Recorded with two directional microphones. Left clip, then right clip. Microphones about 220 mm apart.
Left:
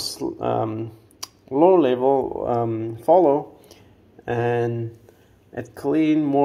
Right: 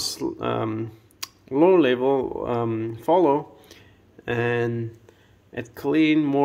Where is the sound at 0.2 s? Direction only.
20° right (ahead or behind).